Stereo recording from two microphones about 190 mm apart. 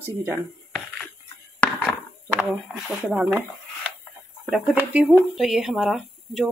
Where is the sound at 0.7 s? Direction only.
10° left (ahead or behind).